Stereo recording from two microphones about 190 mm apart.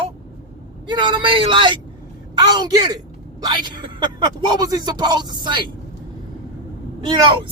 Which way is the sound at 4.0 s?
20° right (ahead or behind).